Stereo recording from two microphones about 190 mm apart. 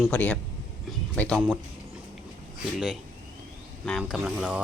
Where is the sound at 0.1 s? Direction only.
5° left (ahead or behind).